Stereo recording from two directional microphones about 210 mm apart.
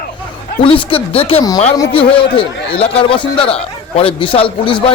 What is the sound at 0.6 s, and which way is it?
A man's voice, 25° left (ahead or behind).